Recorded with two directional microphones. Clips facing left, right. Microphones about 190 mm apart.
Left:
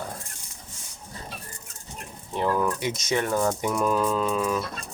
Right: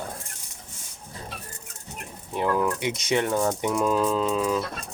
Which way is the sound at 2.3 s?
10° right (ahead or behind).